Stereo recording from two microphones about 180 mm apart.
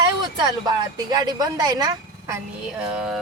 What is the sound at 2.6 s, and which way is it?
Music, 5° right (ahead or behind).